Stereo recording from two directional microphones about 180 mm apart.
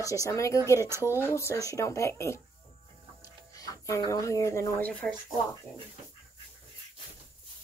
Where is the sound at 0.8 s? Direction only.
15° right (ahead or behind).